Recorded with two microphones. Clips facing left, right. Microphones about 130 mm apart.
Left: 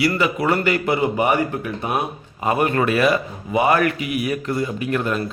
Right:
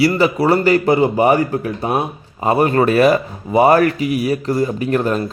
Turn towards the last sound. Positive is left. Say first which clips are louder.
# right 5 dB
turn(degrees=-40)  # may be behind; listen again after turning